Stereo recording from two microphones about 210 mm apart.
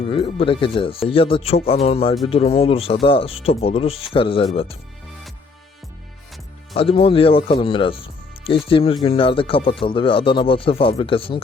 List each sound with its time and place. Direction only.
0.1 s speech: 25° left (ahead or behind)
6.7 s speech: 25° left (ahead or behind)